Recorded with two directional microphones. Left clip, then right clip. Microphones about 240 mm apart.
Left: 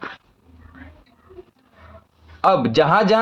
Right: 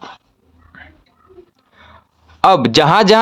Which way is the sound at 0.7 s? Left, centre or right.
Right.